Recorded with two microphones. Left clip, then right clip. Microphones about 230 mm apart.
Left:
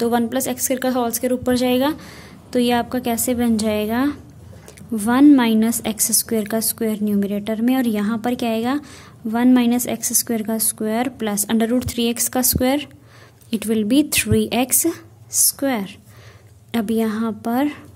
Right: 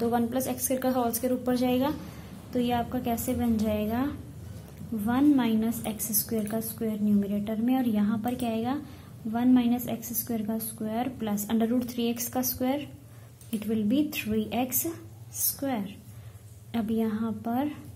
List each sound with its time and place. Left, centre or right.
0.0 s a woman's voice: left